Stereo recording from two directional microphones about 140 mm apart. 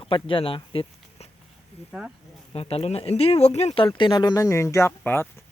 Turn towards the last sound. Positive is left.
turn(degrees=15)  # may be behind; listen again after turning